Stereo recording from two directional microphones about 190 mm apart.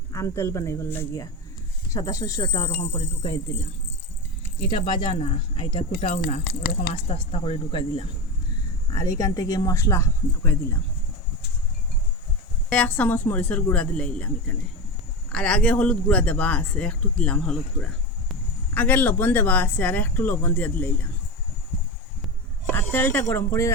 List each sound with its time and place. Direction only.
0.1 s speech: 15° left (ahead or behind); by 3.3 s 35° left (ahead or behind)
4.7 s speech: 25° left (ahead or behind)
9.0 s speech: 15° left (ahead or behind)
12.7 s speech: 5° left (ahead or behind)
22.7 s speech: 10° left (ahead or behind)